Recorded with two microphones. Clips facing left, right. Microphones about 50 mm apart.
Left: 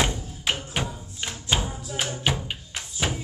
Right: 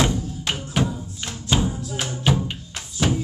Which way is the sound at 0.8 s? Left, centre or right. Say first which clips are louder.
Right 6 dB; centre.